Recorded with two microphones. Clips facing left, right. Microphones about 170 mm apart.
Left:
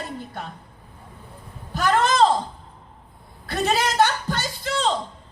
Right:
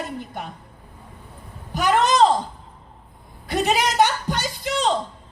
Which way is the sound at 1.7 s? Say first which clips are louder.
Right 1 dB; 15° right (ahead or behind).